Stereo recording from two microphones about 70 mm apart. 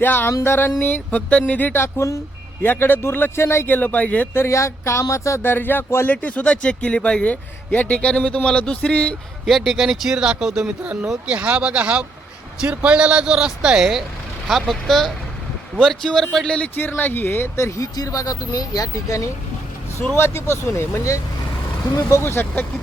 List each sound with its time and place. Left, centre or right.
0.0 s a man's voice: left
0.8 s speech: left
2.6 s a man's voice: left
4.4 s speech: left
5.4 s a man's voice: left
6.1 s speech: centre
9.5 s a man's voice: centre
17.0 s a man's voice: left
17.7 s speech: left
20.1 s a man's voice: left